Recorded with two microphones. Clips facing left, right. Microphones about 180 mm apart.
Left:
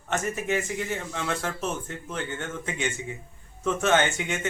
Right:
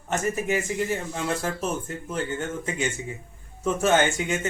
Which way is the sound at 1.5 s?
10° right (ahead or behind).